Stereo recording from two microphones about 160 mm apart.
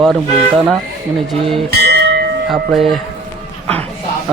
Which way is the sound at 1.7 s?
90° right.